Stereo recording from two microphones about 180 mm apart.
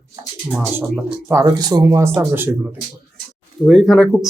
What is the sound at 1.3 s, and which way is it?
Speech, 20° right (ahead or behind).